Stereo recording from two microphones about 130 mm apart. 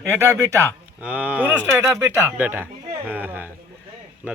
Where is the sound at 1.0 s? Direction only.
10° right (ahead or behind).